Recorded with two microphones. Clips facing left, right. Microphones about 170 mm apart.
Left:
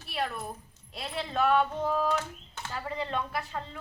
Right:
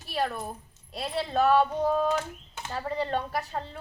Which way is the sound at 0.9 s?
35° right (ahead or behind).